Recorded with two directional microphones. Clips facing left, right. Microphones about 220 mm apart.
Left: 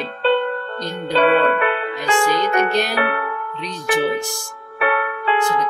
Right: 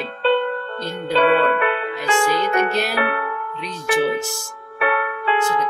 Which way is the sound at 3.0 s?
45° left (ahead or behind).